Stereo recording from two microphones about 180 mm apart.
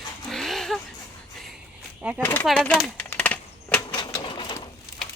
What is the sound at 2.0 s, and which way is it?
Speech, 5° right (ahead or behind).